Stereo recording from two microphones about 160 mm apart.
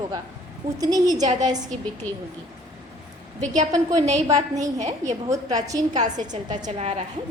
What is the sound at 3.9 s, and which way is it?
Speech, 45° right (ahead or behind).